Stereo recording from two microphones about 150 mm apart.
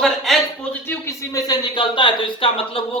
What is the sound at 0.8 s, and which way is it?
Speech, 15° left (ahead or behind).